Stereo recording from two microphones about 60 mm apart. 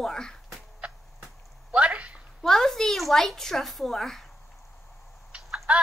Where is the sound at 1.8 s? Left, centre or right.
Right.